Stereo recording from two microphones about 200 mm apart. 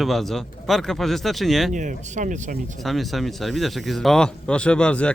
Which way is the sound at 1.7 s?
40° right (ahead or behind).